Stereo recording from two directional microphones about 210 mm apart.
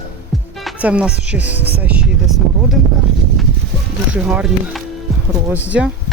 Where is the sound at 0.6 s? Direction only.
5° right (ahead or behind).